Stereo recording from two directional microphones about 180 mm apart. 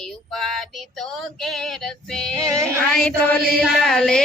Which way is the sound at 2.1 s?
5° left (ahead or behind).